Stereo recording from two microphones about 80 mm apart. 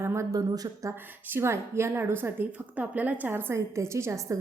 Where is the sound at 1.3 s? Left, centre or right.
Right.